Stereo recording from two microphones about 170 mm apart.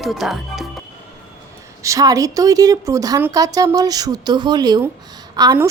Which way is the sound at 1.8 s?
20° right (ahead or behind).